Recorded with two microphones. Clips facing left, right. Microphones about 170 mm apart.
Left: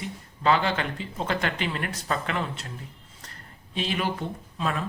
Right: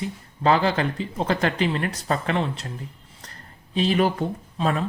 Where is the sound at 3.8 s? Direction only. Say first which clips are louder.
Right 7 dB; 40° right (ahead or behind).